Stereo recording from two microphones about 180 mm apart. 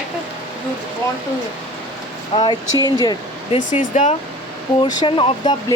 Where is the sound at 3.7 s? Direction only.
40° left (ahead or behind).